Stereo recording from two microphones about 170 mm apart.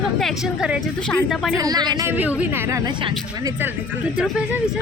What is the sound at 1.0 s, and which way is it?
Speech, 5° left (ahead or behind).